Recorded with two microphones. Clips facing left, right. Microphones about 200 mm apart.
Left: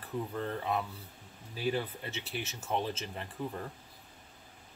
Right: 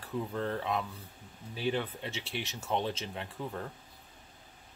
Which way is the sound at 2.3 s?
5° left (ahead or behind).